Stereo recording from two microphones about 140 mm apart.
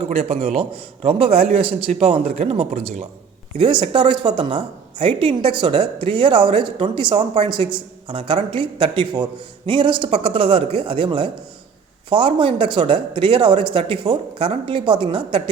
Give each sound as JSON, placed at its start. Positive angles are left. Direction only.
{"t": 0.0, "sound": "a man's voice", "side_deg": -45}
{"t": 3.6, "sound": "a woman's voice", "side_deg": -35}